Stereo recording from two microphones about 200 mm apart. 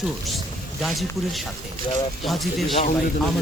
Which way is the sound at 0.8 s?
Centre (ahead or behind).